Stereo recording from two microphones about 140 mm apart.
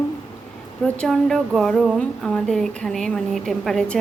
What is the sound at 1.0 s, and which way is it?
A woman's voice, centre (ahead or behind).